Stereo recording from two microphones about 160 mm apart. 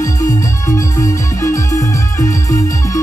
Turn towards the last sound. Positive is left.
turn(degrees=20)  # may be behind; listen again after turning